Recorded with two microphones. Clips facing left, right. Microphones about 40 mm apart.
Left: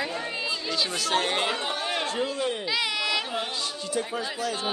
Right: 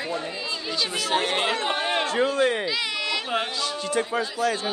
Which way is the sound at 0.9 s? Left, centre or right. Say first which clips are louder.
Right 3 dB; centre.